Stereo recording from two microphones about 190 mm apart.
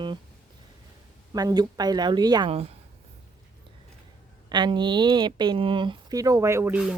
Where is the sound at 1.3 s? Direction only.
20° right (ahead or behind).